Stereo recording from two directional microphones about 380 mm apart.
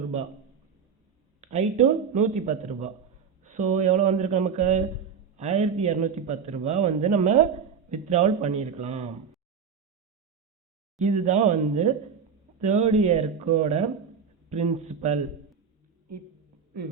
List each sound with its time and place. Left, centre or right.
1.4 s a man's voice: centre
11.0 s a man's voice: centre